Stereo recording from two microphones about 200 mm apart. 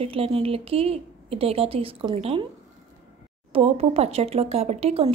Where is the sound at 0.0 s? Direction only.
30° right (ahead or behind).